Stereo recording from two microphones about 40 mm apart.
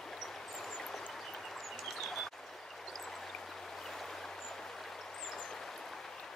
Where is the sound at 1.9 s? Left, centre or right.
Centre.